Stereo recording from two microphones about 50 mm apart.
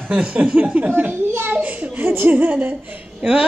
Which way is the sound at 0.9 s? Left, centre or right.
Right.